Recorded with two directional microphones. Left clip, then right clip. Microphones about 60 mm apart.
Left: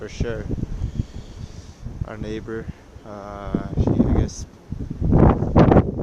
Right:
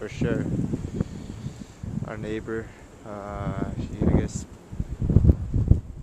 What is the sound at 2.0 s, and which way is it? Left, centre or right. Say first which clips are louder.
Speech: left 1 dB; left.